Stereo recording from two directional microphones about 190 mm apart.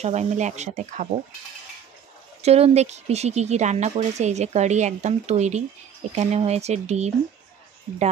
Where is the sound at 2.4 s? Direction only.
35° right (ahead or behind).